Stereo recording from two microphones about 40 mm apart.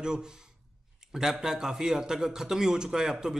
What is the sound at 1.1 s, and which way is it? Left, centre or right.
Speech, centre.